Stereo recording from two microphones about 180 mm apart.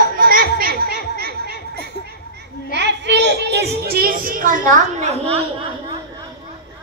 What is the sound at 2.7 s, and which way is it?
A child's voice, 75° right (ahead or behind).